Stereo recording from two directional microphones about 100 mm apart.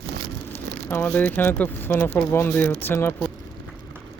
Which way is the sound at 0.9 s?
20° left (ahead or behind).